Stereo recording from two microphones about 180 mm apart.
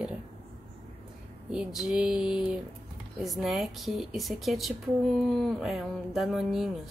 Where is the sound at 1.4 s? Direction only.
Centre (ahead or behind).